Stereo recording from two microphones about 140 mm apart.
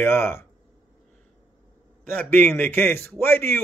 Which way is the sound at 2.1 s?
10° left (ahead or behind).